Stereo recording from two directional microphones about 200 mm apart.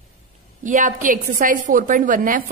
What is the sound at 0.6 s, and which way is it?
A woman's voice, 40° right (ahead or behind).